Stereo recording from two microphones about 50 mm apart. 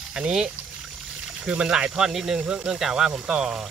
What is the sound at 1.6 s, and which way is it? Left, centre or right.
Speech, centre.